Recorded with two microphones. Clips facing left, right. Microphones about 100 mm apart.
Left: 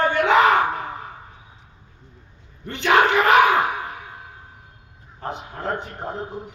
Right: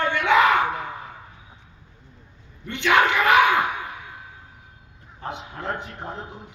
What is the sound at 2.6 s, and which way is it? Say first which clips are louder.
Speech: left 2 dB; 35° left (ahead or behind).